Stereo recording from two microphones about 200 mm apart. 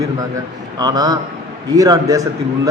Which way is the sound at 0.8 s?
20° right (ahead or behind).